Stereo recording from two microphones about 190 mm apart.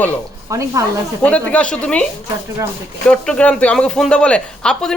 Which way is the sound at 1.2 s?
5° left (ahead or behind).